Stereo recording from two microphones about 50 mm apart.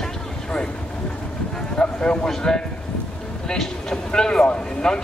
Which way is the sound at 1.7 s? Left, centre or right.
Centre.